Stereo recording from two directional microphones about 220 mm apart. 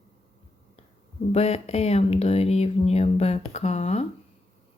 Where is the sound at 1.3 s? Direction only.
30° left (ahead or behind).